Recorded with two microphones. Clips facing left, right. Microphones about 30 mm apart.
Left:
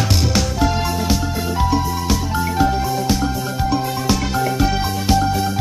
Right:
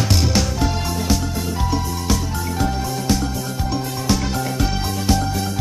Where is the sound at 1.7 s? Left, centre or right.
Centre.